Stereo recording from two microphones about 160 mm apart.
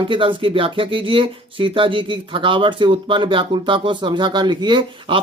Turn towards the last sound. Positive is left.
turn(degrees=-30)  # may be behind; listen again after turning